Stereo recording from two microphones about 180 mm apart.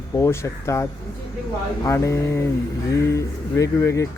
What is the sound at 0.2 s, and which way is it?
Speech, 15° left (ahead or behind).